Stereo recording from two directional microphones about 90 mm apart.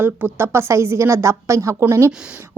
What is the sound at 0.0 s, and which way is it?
A woman's voice, 25° right (ahead or behind).